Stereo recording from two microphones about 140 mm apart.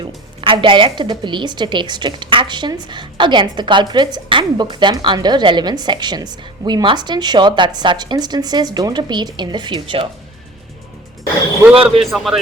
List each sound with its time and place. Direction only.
0.4 s a woman's voice: 35° right (ahead or behind)
11.7 s a woman's voice: 40° right (ahead or behind)
12.1 s speech: 5° right (ahead or behind)